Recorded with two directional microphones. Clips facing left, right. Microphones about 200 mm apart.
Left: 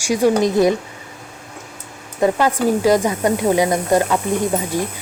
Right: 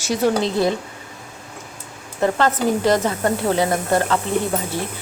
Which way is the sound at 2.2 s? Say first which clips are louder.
Left 2 dB; 10° left (ahead or behind).